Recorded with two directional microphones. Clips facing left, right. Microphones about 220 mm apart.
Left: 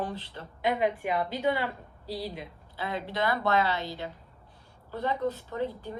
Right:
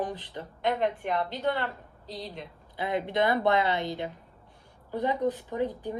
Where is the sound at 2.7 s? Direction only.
20° right (ahead or behind).